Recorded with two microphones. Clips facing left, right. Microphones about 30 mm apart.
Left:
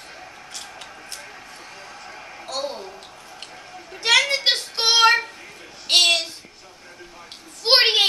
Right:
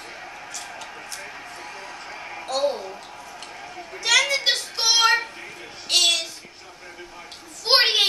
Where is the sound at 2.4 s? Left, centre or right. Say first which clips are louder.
Right 5 dB; centre.